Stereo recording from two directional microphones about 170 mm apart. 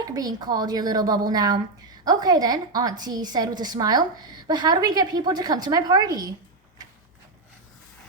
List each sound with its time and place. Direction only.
0.0 s a woman's voice: 20° right (ahead or behind)